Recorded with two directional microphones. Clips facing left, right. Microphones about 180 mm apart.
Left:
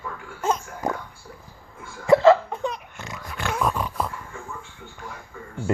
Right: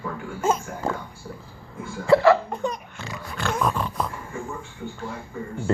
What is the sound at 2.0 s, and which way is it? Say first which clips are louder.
Hiccup: left 1 dB; 20° left (ahead or behind).